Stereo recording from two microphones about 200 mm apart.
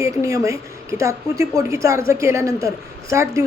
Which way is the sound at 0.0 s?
15° right (ahead or behind).